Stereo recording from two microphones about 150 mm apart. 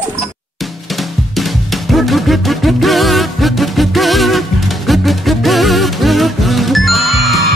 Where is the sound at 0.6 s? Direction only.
Centre (ahead or behind).